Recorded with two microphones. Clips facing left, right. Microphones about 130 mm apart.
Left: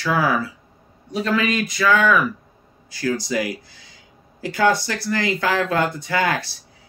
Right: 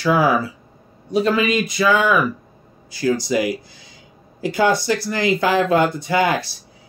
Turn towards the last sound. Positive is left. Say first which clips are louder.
# right 3 dB
turn(degrees=-15)  # may be behind; listen again after turning